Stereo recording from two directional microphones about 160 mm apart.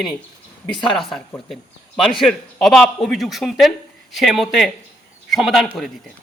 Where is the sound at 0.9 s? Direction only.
Centre (ahead or behind).